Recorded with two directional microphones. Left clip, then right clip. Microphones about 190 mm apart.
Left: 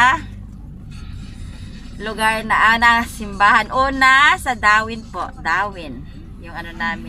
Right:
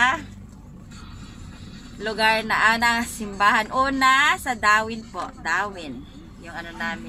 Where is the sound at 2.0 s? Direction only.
Centre (ahead or behind).